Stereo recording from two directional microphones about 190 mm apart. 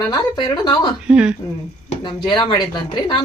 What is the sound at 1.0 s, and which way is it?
Speech, 5° right (ahead or behind).